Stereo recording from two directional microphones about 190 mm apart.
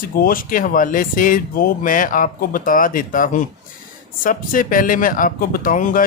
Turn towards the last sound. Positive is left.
turn(degrees=45)  # may be behind; listen again after turning